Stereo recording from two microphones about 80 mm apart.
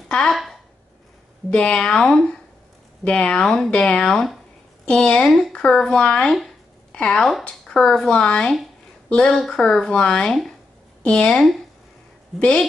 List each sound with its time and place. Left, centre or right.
0.3 s speech: centre
1.5 s speech: centre